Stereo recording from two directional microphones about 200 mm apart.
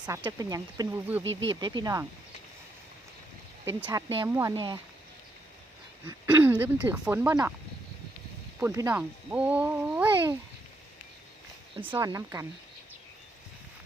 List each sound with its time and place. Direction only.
0.2 s speech: 20° right (ahead or behind)
1.2 s speech: 70° right (ahead or behind)
1.5 s speech: 20° right (ahead or behind)
3.7 s speech: 10° right (ahead or behind)
6.1 s speech: 15° right (ahead or behind)
8.5 s speech: 15° right (ahead or behind)
11.8 s speech: 15° right (ahead or behind)